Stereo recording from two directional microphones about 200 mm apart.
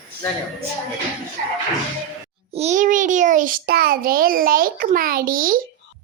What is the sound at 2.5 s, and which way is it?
A child's voice, 35° right (ahead or behind).